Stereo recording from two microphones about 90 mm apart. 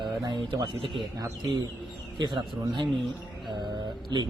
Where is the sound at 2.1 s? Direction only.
60° right (ahead or behind).